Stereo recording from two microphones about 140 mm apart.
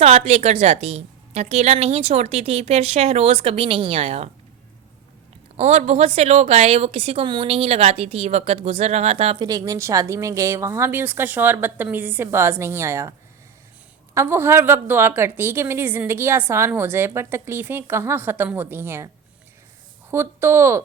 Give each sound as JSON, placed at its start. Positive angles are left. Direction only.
{"t": 0.0, "sound": "a woman's voice", "side_deg": -45}
{"t": 5.5, "sound": "a woman's voice", "side_deg": -50}
{"t": 9.4, "sound": "a woman's voice", "side_deg": -25}
{"t": 20.1, "sound": "a woman's voice", "side_deg": -15}